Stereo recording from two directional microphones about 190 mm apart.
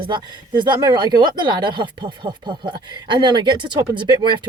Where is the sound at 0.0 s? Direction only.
25° right (ahead or behind).